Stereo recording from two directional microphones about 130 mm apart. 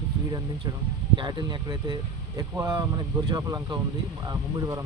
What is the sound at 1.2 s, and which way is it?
Speech, 35° right (ahead or behind).